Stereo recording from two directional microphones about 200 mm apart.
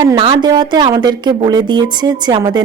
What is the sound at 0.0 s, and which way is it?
A woman's voice, 25° right (ahead or behind).